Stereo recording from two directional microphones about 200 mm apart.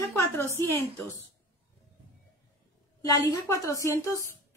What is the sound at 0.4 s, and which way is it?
Speech, 10° left (ahead or behind).